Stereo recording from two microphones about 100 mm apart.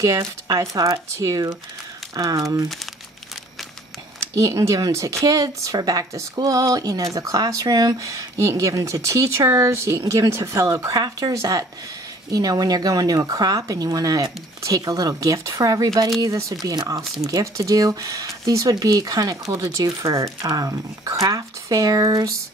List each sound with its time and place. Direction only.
0.0 s speech: 35° right (ahead or behind)
4.2 s speech: 30° right (ahead or behind)